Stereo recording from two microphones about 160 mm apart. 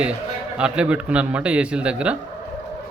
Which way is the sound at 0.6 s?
5° right (ahead or behind).